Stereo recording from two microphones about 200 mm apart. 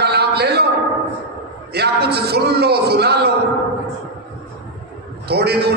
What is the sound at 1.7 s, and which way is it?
A man's voice, 55° right (ahead or behind).